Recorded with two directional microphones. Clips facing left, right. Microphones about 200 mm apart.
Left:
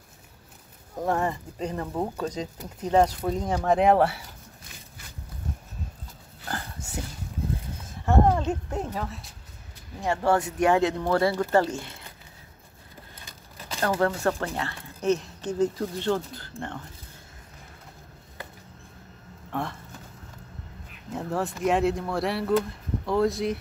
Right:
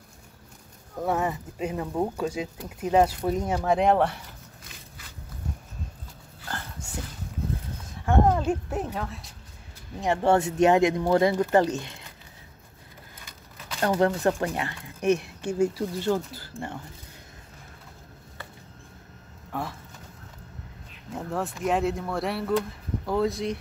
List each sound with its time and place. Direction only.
1.0 s speech: 5° right (ahead or behind)
8.0 s a sound: centre (ahead or behind)
9.9 s speech: 20° right (ahead or behind)
13.7 s speech: 20° right (ahead or behind)
19.5 s speech: centre (ahead or behind)
21.1 s speech: centre (ahead or behind)